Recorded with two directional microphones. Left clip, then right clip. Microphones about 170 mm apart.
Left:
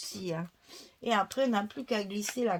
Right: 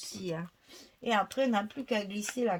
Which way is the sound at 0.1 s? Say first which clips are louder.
Right 1 dB; 35° left (ahead or behind).